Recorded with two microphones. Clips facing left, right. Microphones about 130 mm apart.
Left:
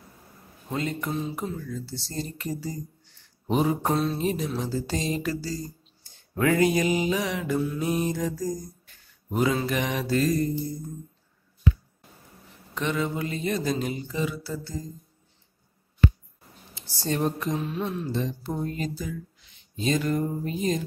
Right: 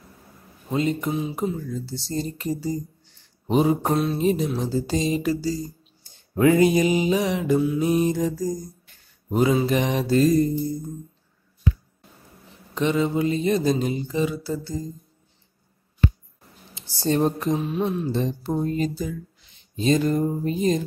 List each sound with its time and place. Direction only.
0.7 s speech: 20° right (ahead or behind)
3.8 s mantra: 5° right (ahead or behind)
4.2 s speech: 20° right (ahead or behind)
4.6 s a sound: 20° right (ahead or behind)
6.3 s speech: 20° right (ahead or behind)
12.7 s speech: 20° right (ahead or behind)
17.0 s a sound: 30° right (ahead or behind)
17.6 s speech: 20° right (ahead or behind)
18.1 s speech: 30° right (ahead or behind)
19.8 s a sound: 30° right (ahead or behind)